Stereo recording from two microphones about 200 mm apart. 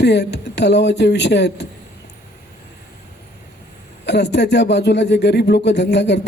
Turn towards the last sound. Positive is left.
turn(degrees=60)  # may be behind; listen again after turning